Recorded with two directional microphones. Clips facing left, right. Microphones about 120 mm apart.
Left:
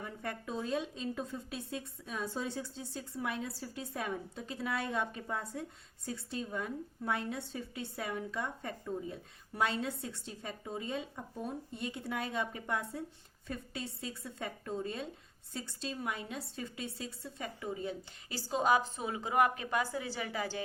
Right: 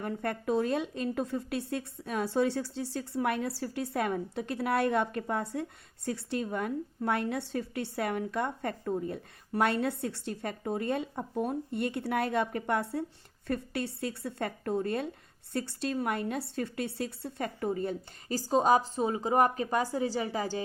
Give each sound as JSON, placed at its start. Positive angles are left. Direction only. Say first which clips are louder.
{"t": 0.0, "sound": "a woman's voice", "louder": "right 8 dB", "side_deg": -60}